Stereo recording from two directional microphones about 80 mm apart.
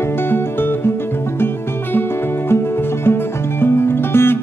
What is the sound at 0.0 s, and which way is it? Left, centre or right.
Music, left.